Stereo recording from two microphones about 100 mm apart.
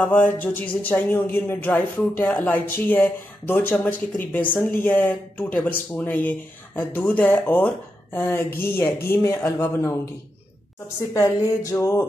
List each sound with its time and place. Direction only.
0.0 s speech: 15° left (ahead or behind)
11.0 s speech: 30° left (ahead or behind)